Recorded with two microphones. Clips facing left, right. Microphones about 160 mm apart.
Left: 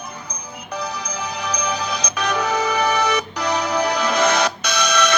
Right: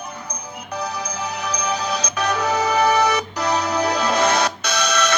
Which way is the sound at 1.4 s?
15° left (ahead or behind).